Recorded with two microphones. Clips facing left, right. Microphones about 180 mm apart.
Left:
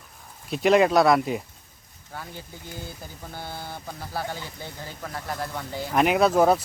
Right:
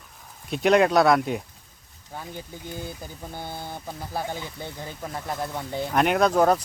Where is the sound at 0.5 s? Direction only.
Centre (ahead or behind).